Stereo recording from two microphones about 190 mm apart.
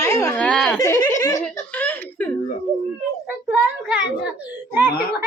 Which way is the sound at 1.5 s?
10° left (ahead or behind).